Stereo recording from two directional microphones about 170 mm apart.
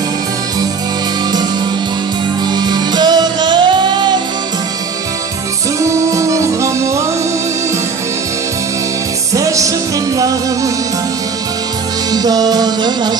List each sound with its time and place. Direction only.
2.5 s music: 25° right (ahead or behind)
5.8 s music: 20° right (ahead or behind)
9.3 s music: 20° right (ahead or behind)
12.1 s music: 25° right (ahead or behind)